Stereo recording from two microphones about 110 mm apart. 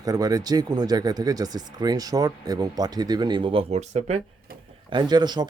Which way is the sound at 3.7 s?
90° right.